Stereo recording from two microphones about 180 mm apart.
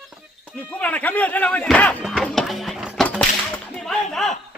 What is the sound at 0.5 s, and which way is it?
Speech, 10° left (ahead or behind).